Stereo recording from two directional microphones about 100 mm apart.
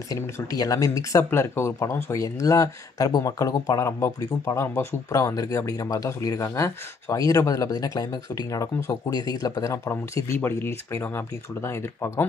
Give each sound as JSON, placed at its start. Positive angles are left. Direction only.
{"t": 0.1, "sound": "speech", "side_deg": 35}
{"t": 1.3, "sound": "speech", "side_deg": 25}